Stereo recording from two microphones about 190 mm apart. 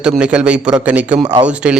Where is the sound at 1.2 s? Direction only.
35° right (ahead or behind).